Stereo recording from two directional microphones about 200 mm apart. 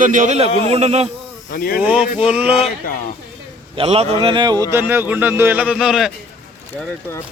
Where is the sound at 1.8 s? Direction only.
5° right (ahead or behind).